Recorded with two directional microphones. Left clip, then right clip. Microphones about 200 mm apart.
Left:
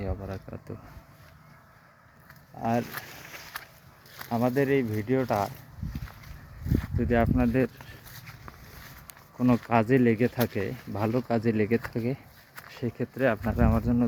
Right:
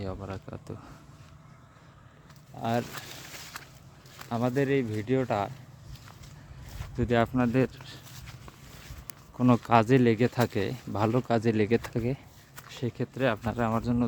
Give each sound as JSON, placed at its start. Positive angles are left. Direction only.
{"t": 0.1, "sound": "speech", "side_deg": -15}
{"t": 2.6, "sound": "speech", "side_deg": -10}
{"t": 3.6, "sound": "a sound", "side_deg": 20}
{"t": 4.3, "sound": "speech", "side_deg": -10}
{"t": 7.0, "sound": "speech", "side_deg": -20}
{"t": 9.6, "sound": "speech", "side_deg": -20}